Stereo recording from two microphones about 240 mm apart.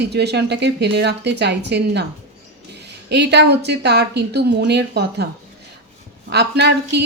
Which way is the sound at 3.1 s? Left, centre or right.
Right.